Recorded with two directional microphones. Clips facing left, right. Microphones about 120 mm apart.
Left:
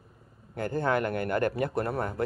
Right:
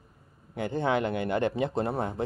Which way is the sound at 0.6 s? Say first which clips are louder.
Even; 20° right (ahead or behind).